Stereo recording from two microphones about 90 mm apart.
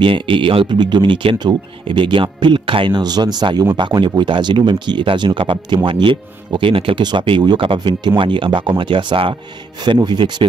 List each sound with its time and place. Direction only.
0.0 s speech: 70° right (ahead or behind)
2.9 s speech: 50° right (ahead or behind); by 5.8 s 80° right
5.9 s speech: 65° right (ahead or behind); by 7.0 s 90° right
7.0 s speech: 60° right (ahead or behind)